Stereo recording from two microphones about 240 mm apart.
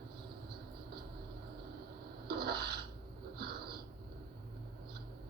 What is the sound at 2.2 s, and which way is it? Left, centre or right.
Rub, right.